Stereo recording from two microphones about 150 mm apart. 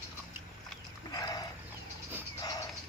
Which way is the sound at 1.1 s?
25° left (ahead or behind).